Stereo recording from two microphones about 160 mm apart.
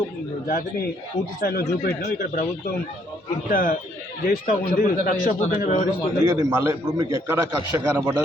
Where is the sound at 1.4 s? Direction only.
70° left (ahead or behind).